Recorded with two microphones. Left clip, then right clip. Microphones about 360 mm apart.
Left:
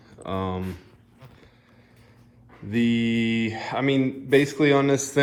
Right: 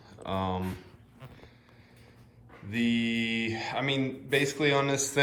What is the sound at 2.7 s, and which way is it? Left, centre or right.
A man's voice, centre.